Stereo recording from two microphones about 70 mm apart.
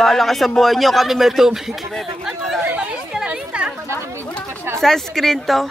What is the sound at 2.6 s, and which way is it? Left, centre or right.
Chatter, right.